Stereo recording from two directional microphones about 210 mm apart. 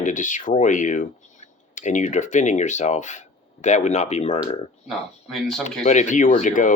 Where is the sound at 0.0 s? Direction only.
35° left (ahead or behind).